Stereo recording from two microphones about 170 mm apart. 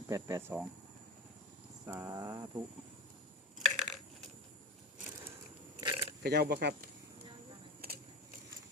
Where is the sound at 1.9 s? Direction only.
15° right (ahead or behind).